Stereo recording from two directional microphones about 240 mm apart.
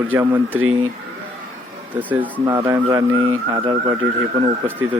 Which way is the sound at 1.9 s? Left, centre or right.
Centre.